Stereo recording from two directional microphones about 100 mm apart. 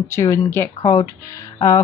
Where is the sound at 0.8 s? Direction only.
40° left (ahead or behind).